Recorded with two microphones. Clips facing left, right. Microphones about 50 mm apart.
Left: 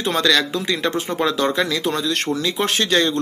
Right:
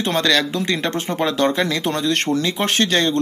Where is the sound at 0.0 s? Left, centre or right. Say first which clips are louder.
Even; centre.